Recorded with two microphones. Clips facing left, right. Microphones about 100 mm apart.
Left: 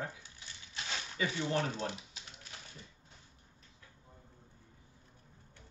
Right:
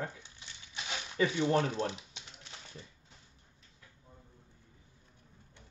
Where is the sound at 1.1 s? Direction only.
40° right (ahead or behind).